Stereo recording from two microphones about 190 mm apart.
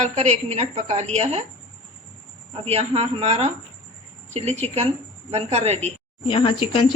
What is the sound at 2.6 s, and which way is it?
A woman's voice, 30° right (ahead or behind).